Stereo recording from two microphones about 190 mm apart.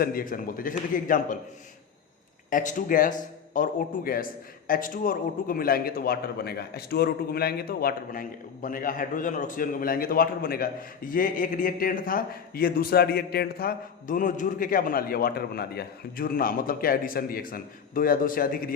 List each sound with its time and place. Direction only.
0.0 s a man's voice: 50° left (ahead or behind)
2.5 s a man's voice: 45° left (ahead or behind)